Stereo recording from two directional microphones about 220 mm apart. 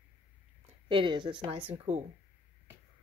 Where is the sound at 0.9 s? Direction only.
20° right (ahead or behind).